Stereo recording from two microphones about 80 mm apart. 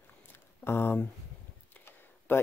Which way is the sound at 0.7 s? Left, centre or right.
Left.